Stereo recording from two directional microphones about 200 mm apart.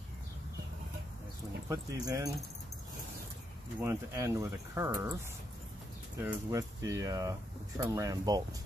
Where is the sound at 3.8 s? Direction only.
15° right (ahead or behind).